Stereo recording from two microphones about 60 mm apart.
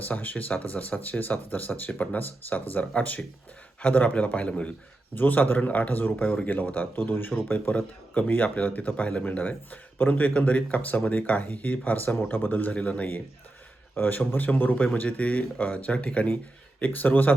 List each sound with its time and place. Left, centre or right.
0.0 s speech: left
5.1 s a man's voice: left